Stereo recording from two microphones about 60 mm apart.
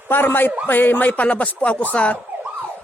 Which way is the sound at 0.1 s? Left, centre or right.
Left.